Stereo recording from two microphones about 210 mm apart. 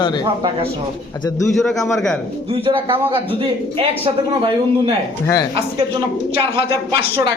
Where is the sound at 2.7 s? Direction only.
20° right (ahead or behind).